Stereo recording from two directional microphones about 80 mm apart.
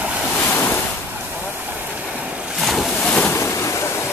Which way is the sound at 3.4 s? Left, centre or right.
Left.